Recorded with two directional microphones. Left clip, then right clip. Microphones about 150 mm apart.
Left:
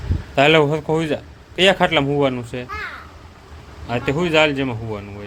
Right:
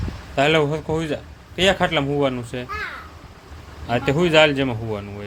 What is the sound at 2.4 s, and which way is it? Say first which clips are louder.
Speech: left 1 dB; 5° left (ahead or behind).